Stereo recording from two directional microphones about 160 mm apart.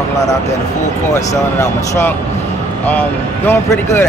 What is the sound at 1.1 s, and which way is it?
Speech, 15° left (ahead or behind).